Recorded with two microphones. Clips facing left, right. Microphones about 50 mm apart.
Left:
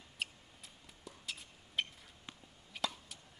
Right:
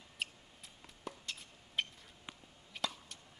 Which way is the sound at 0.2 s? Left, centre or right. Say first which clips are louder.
Even; centre.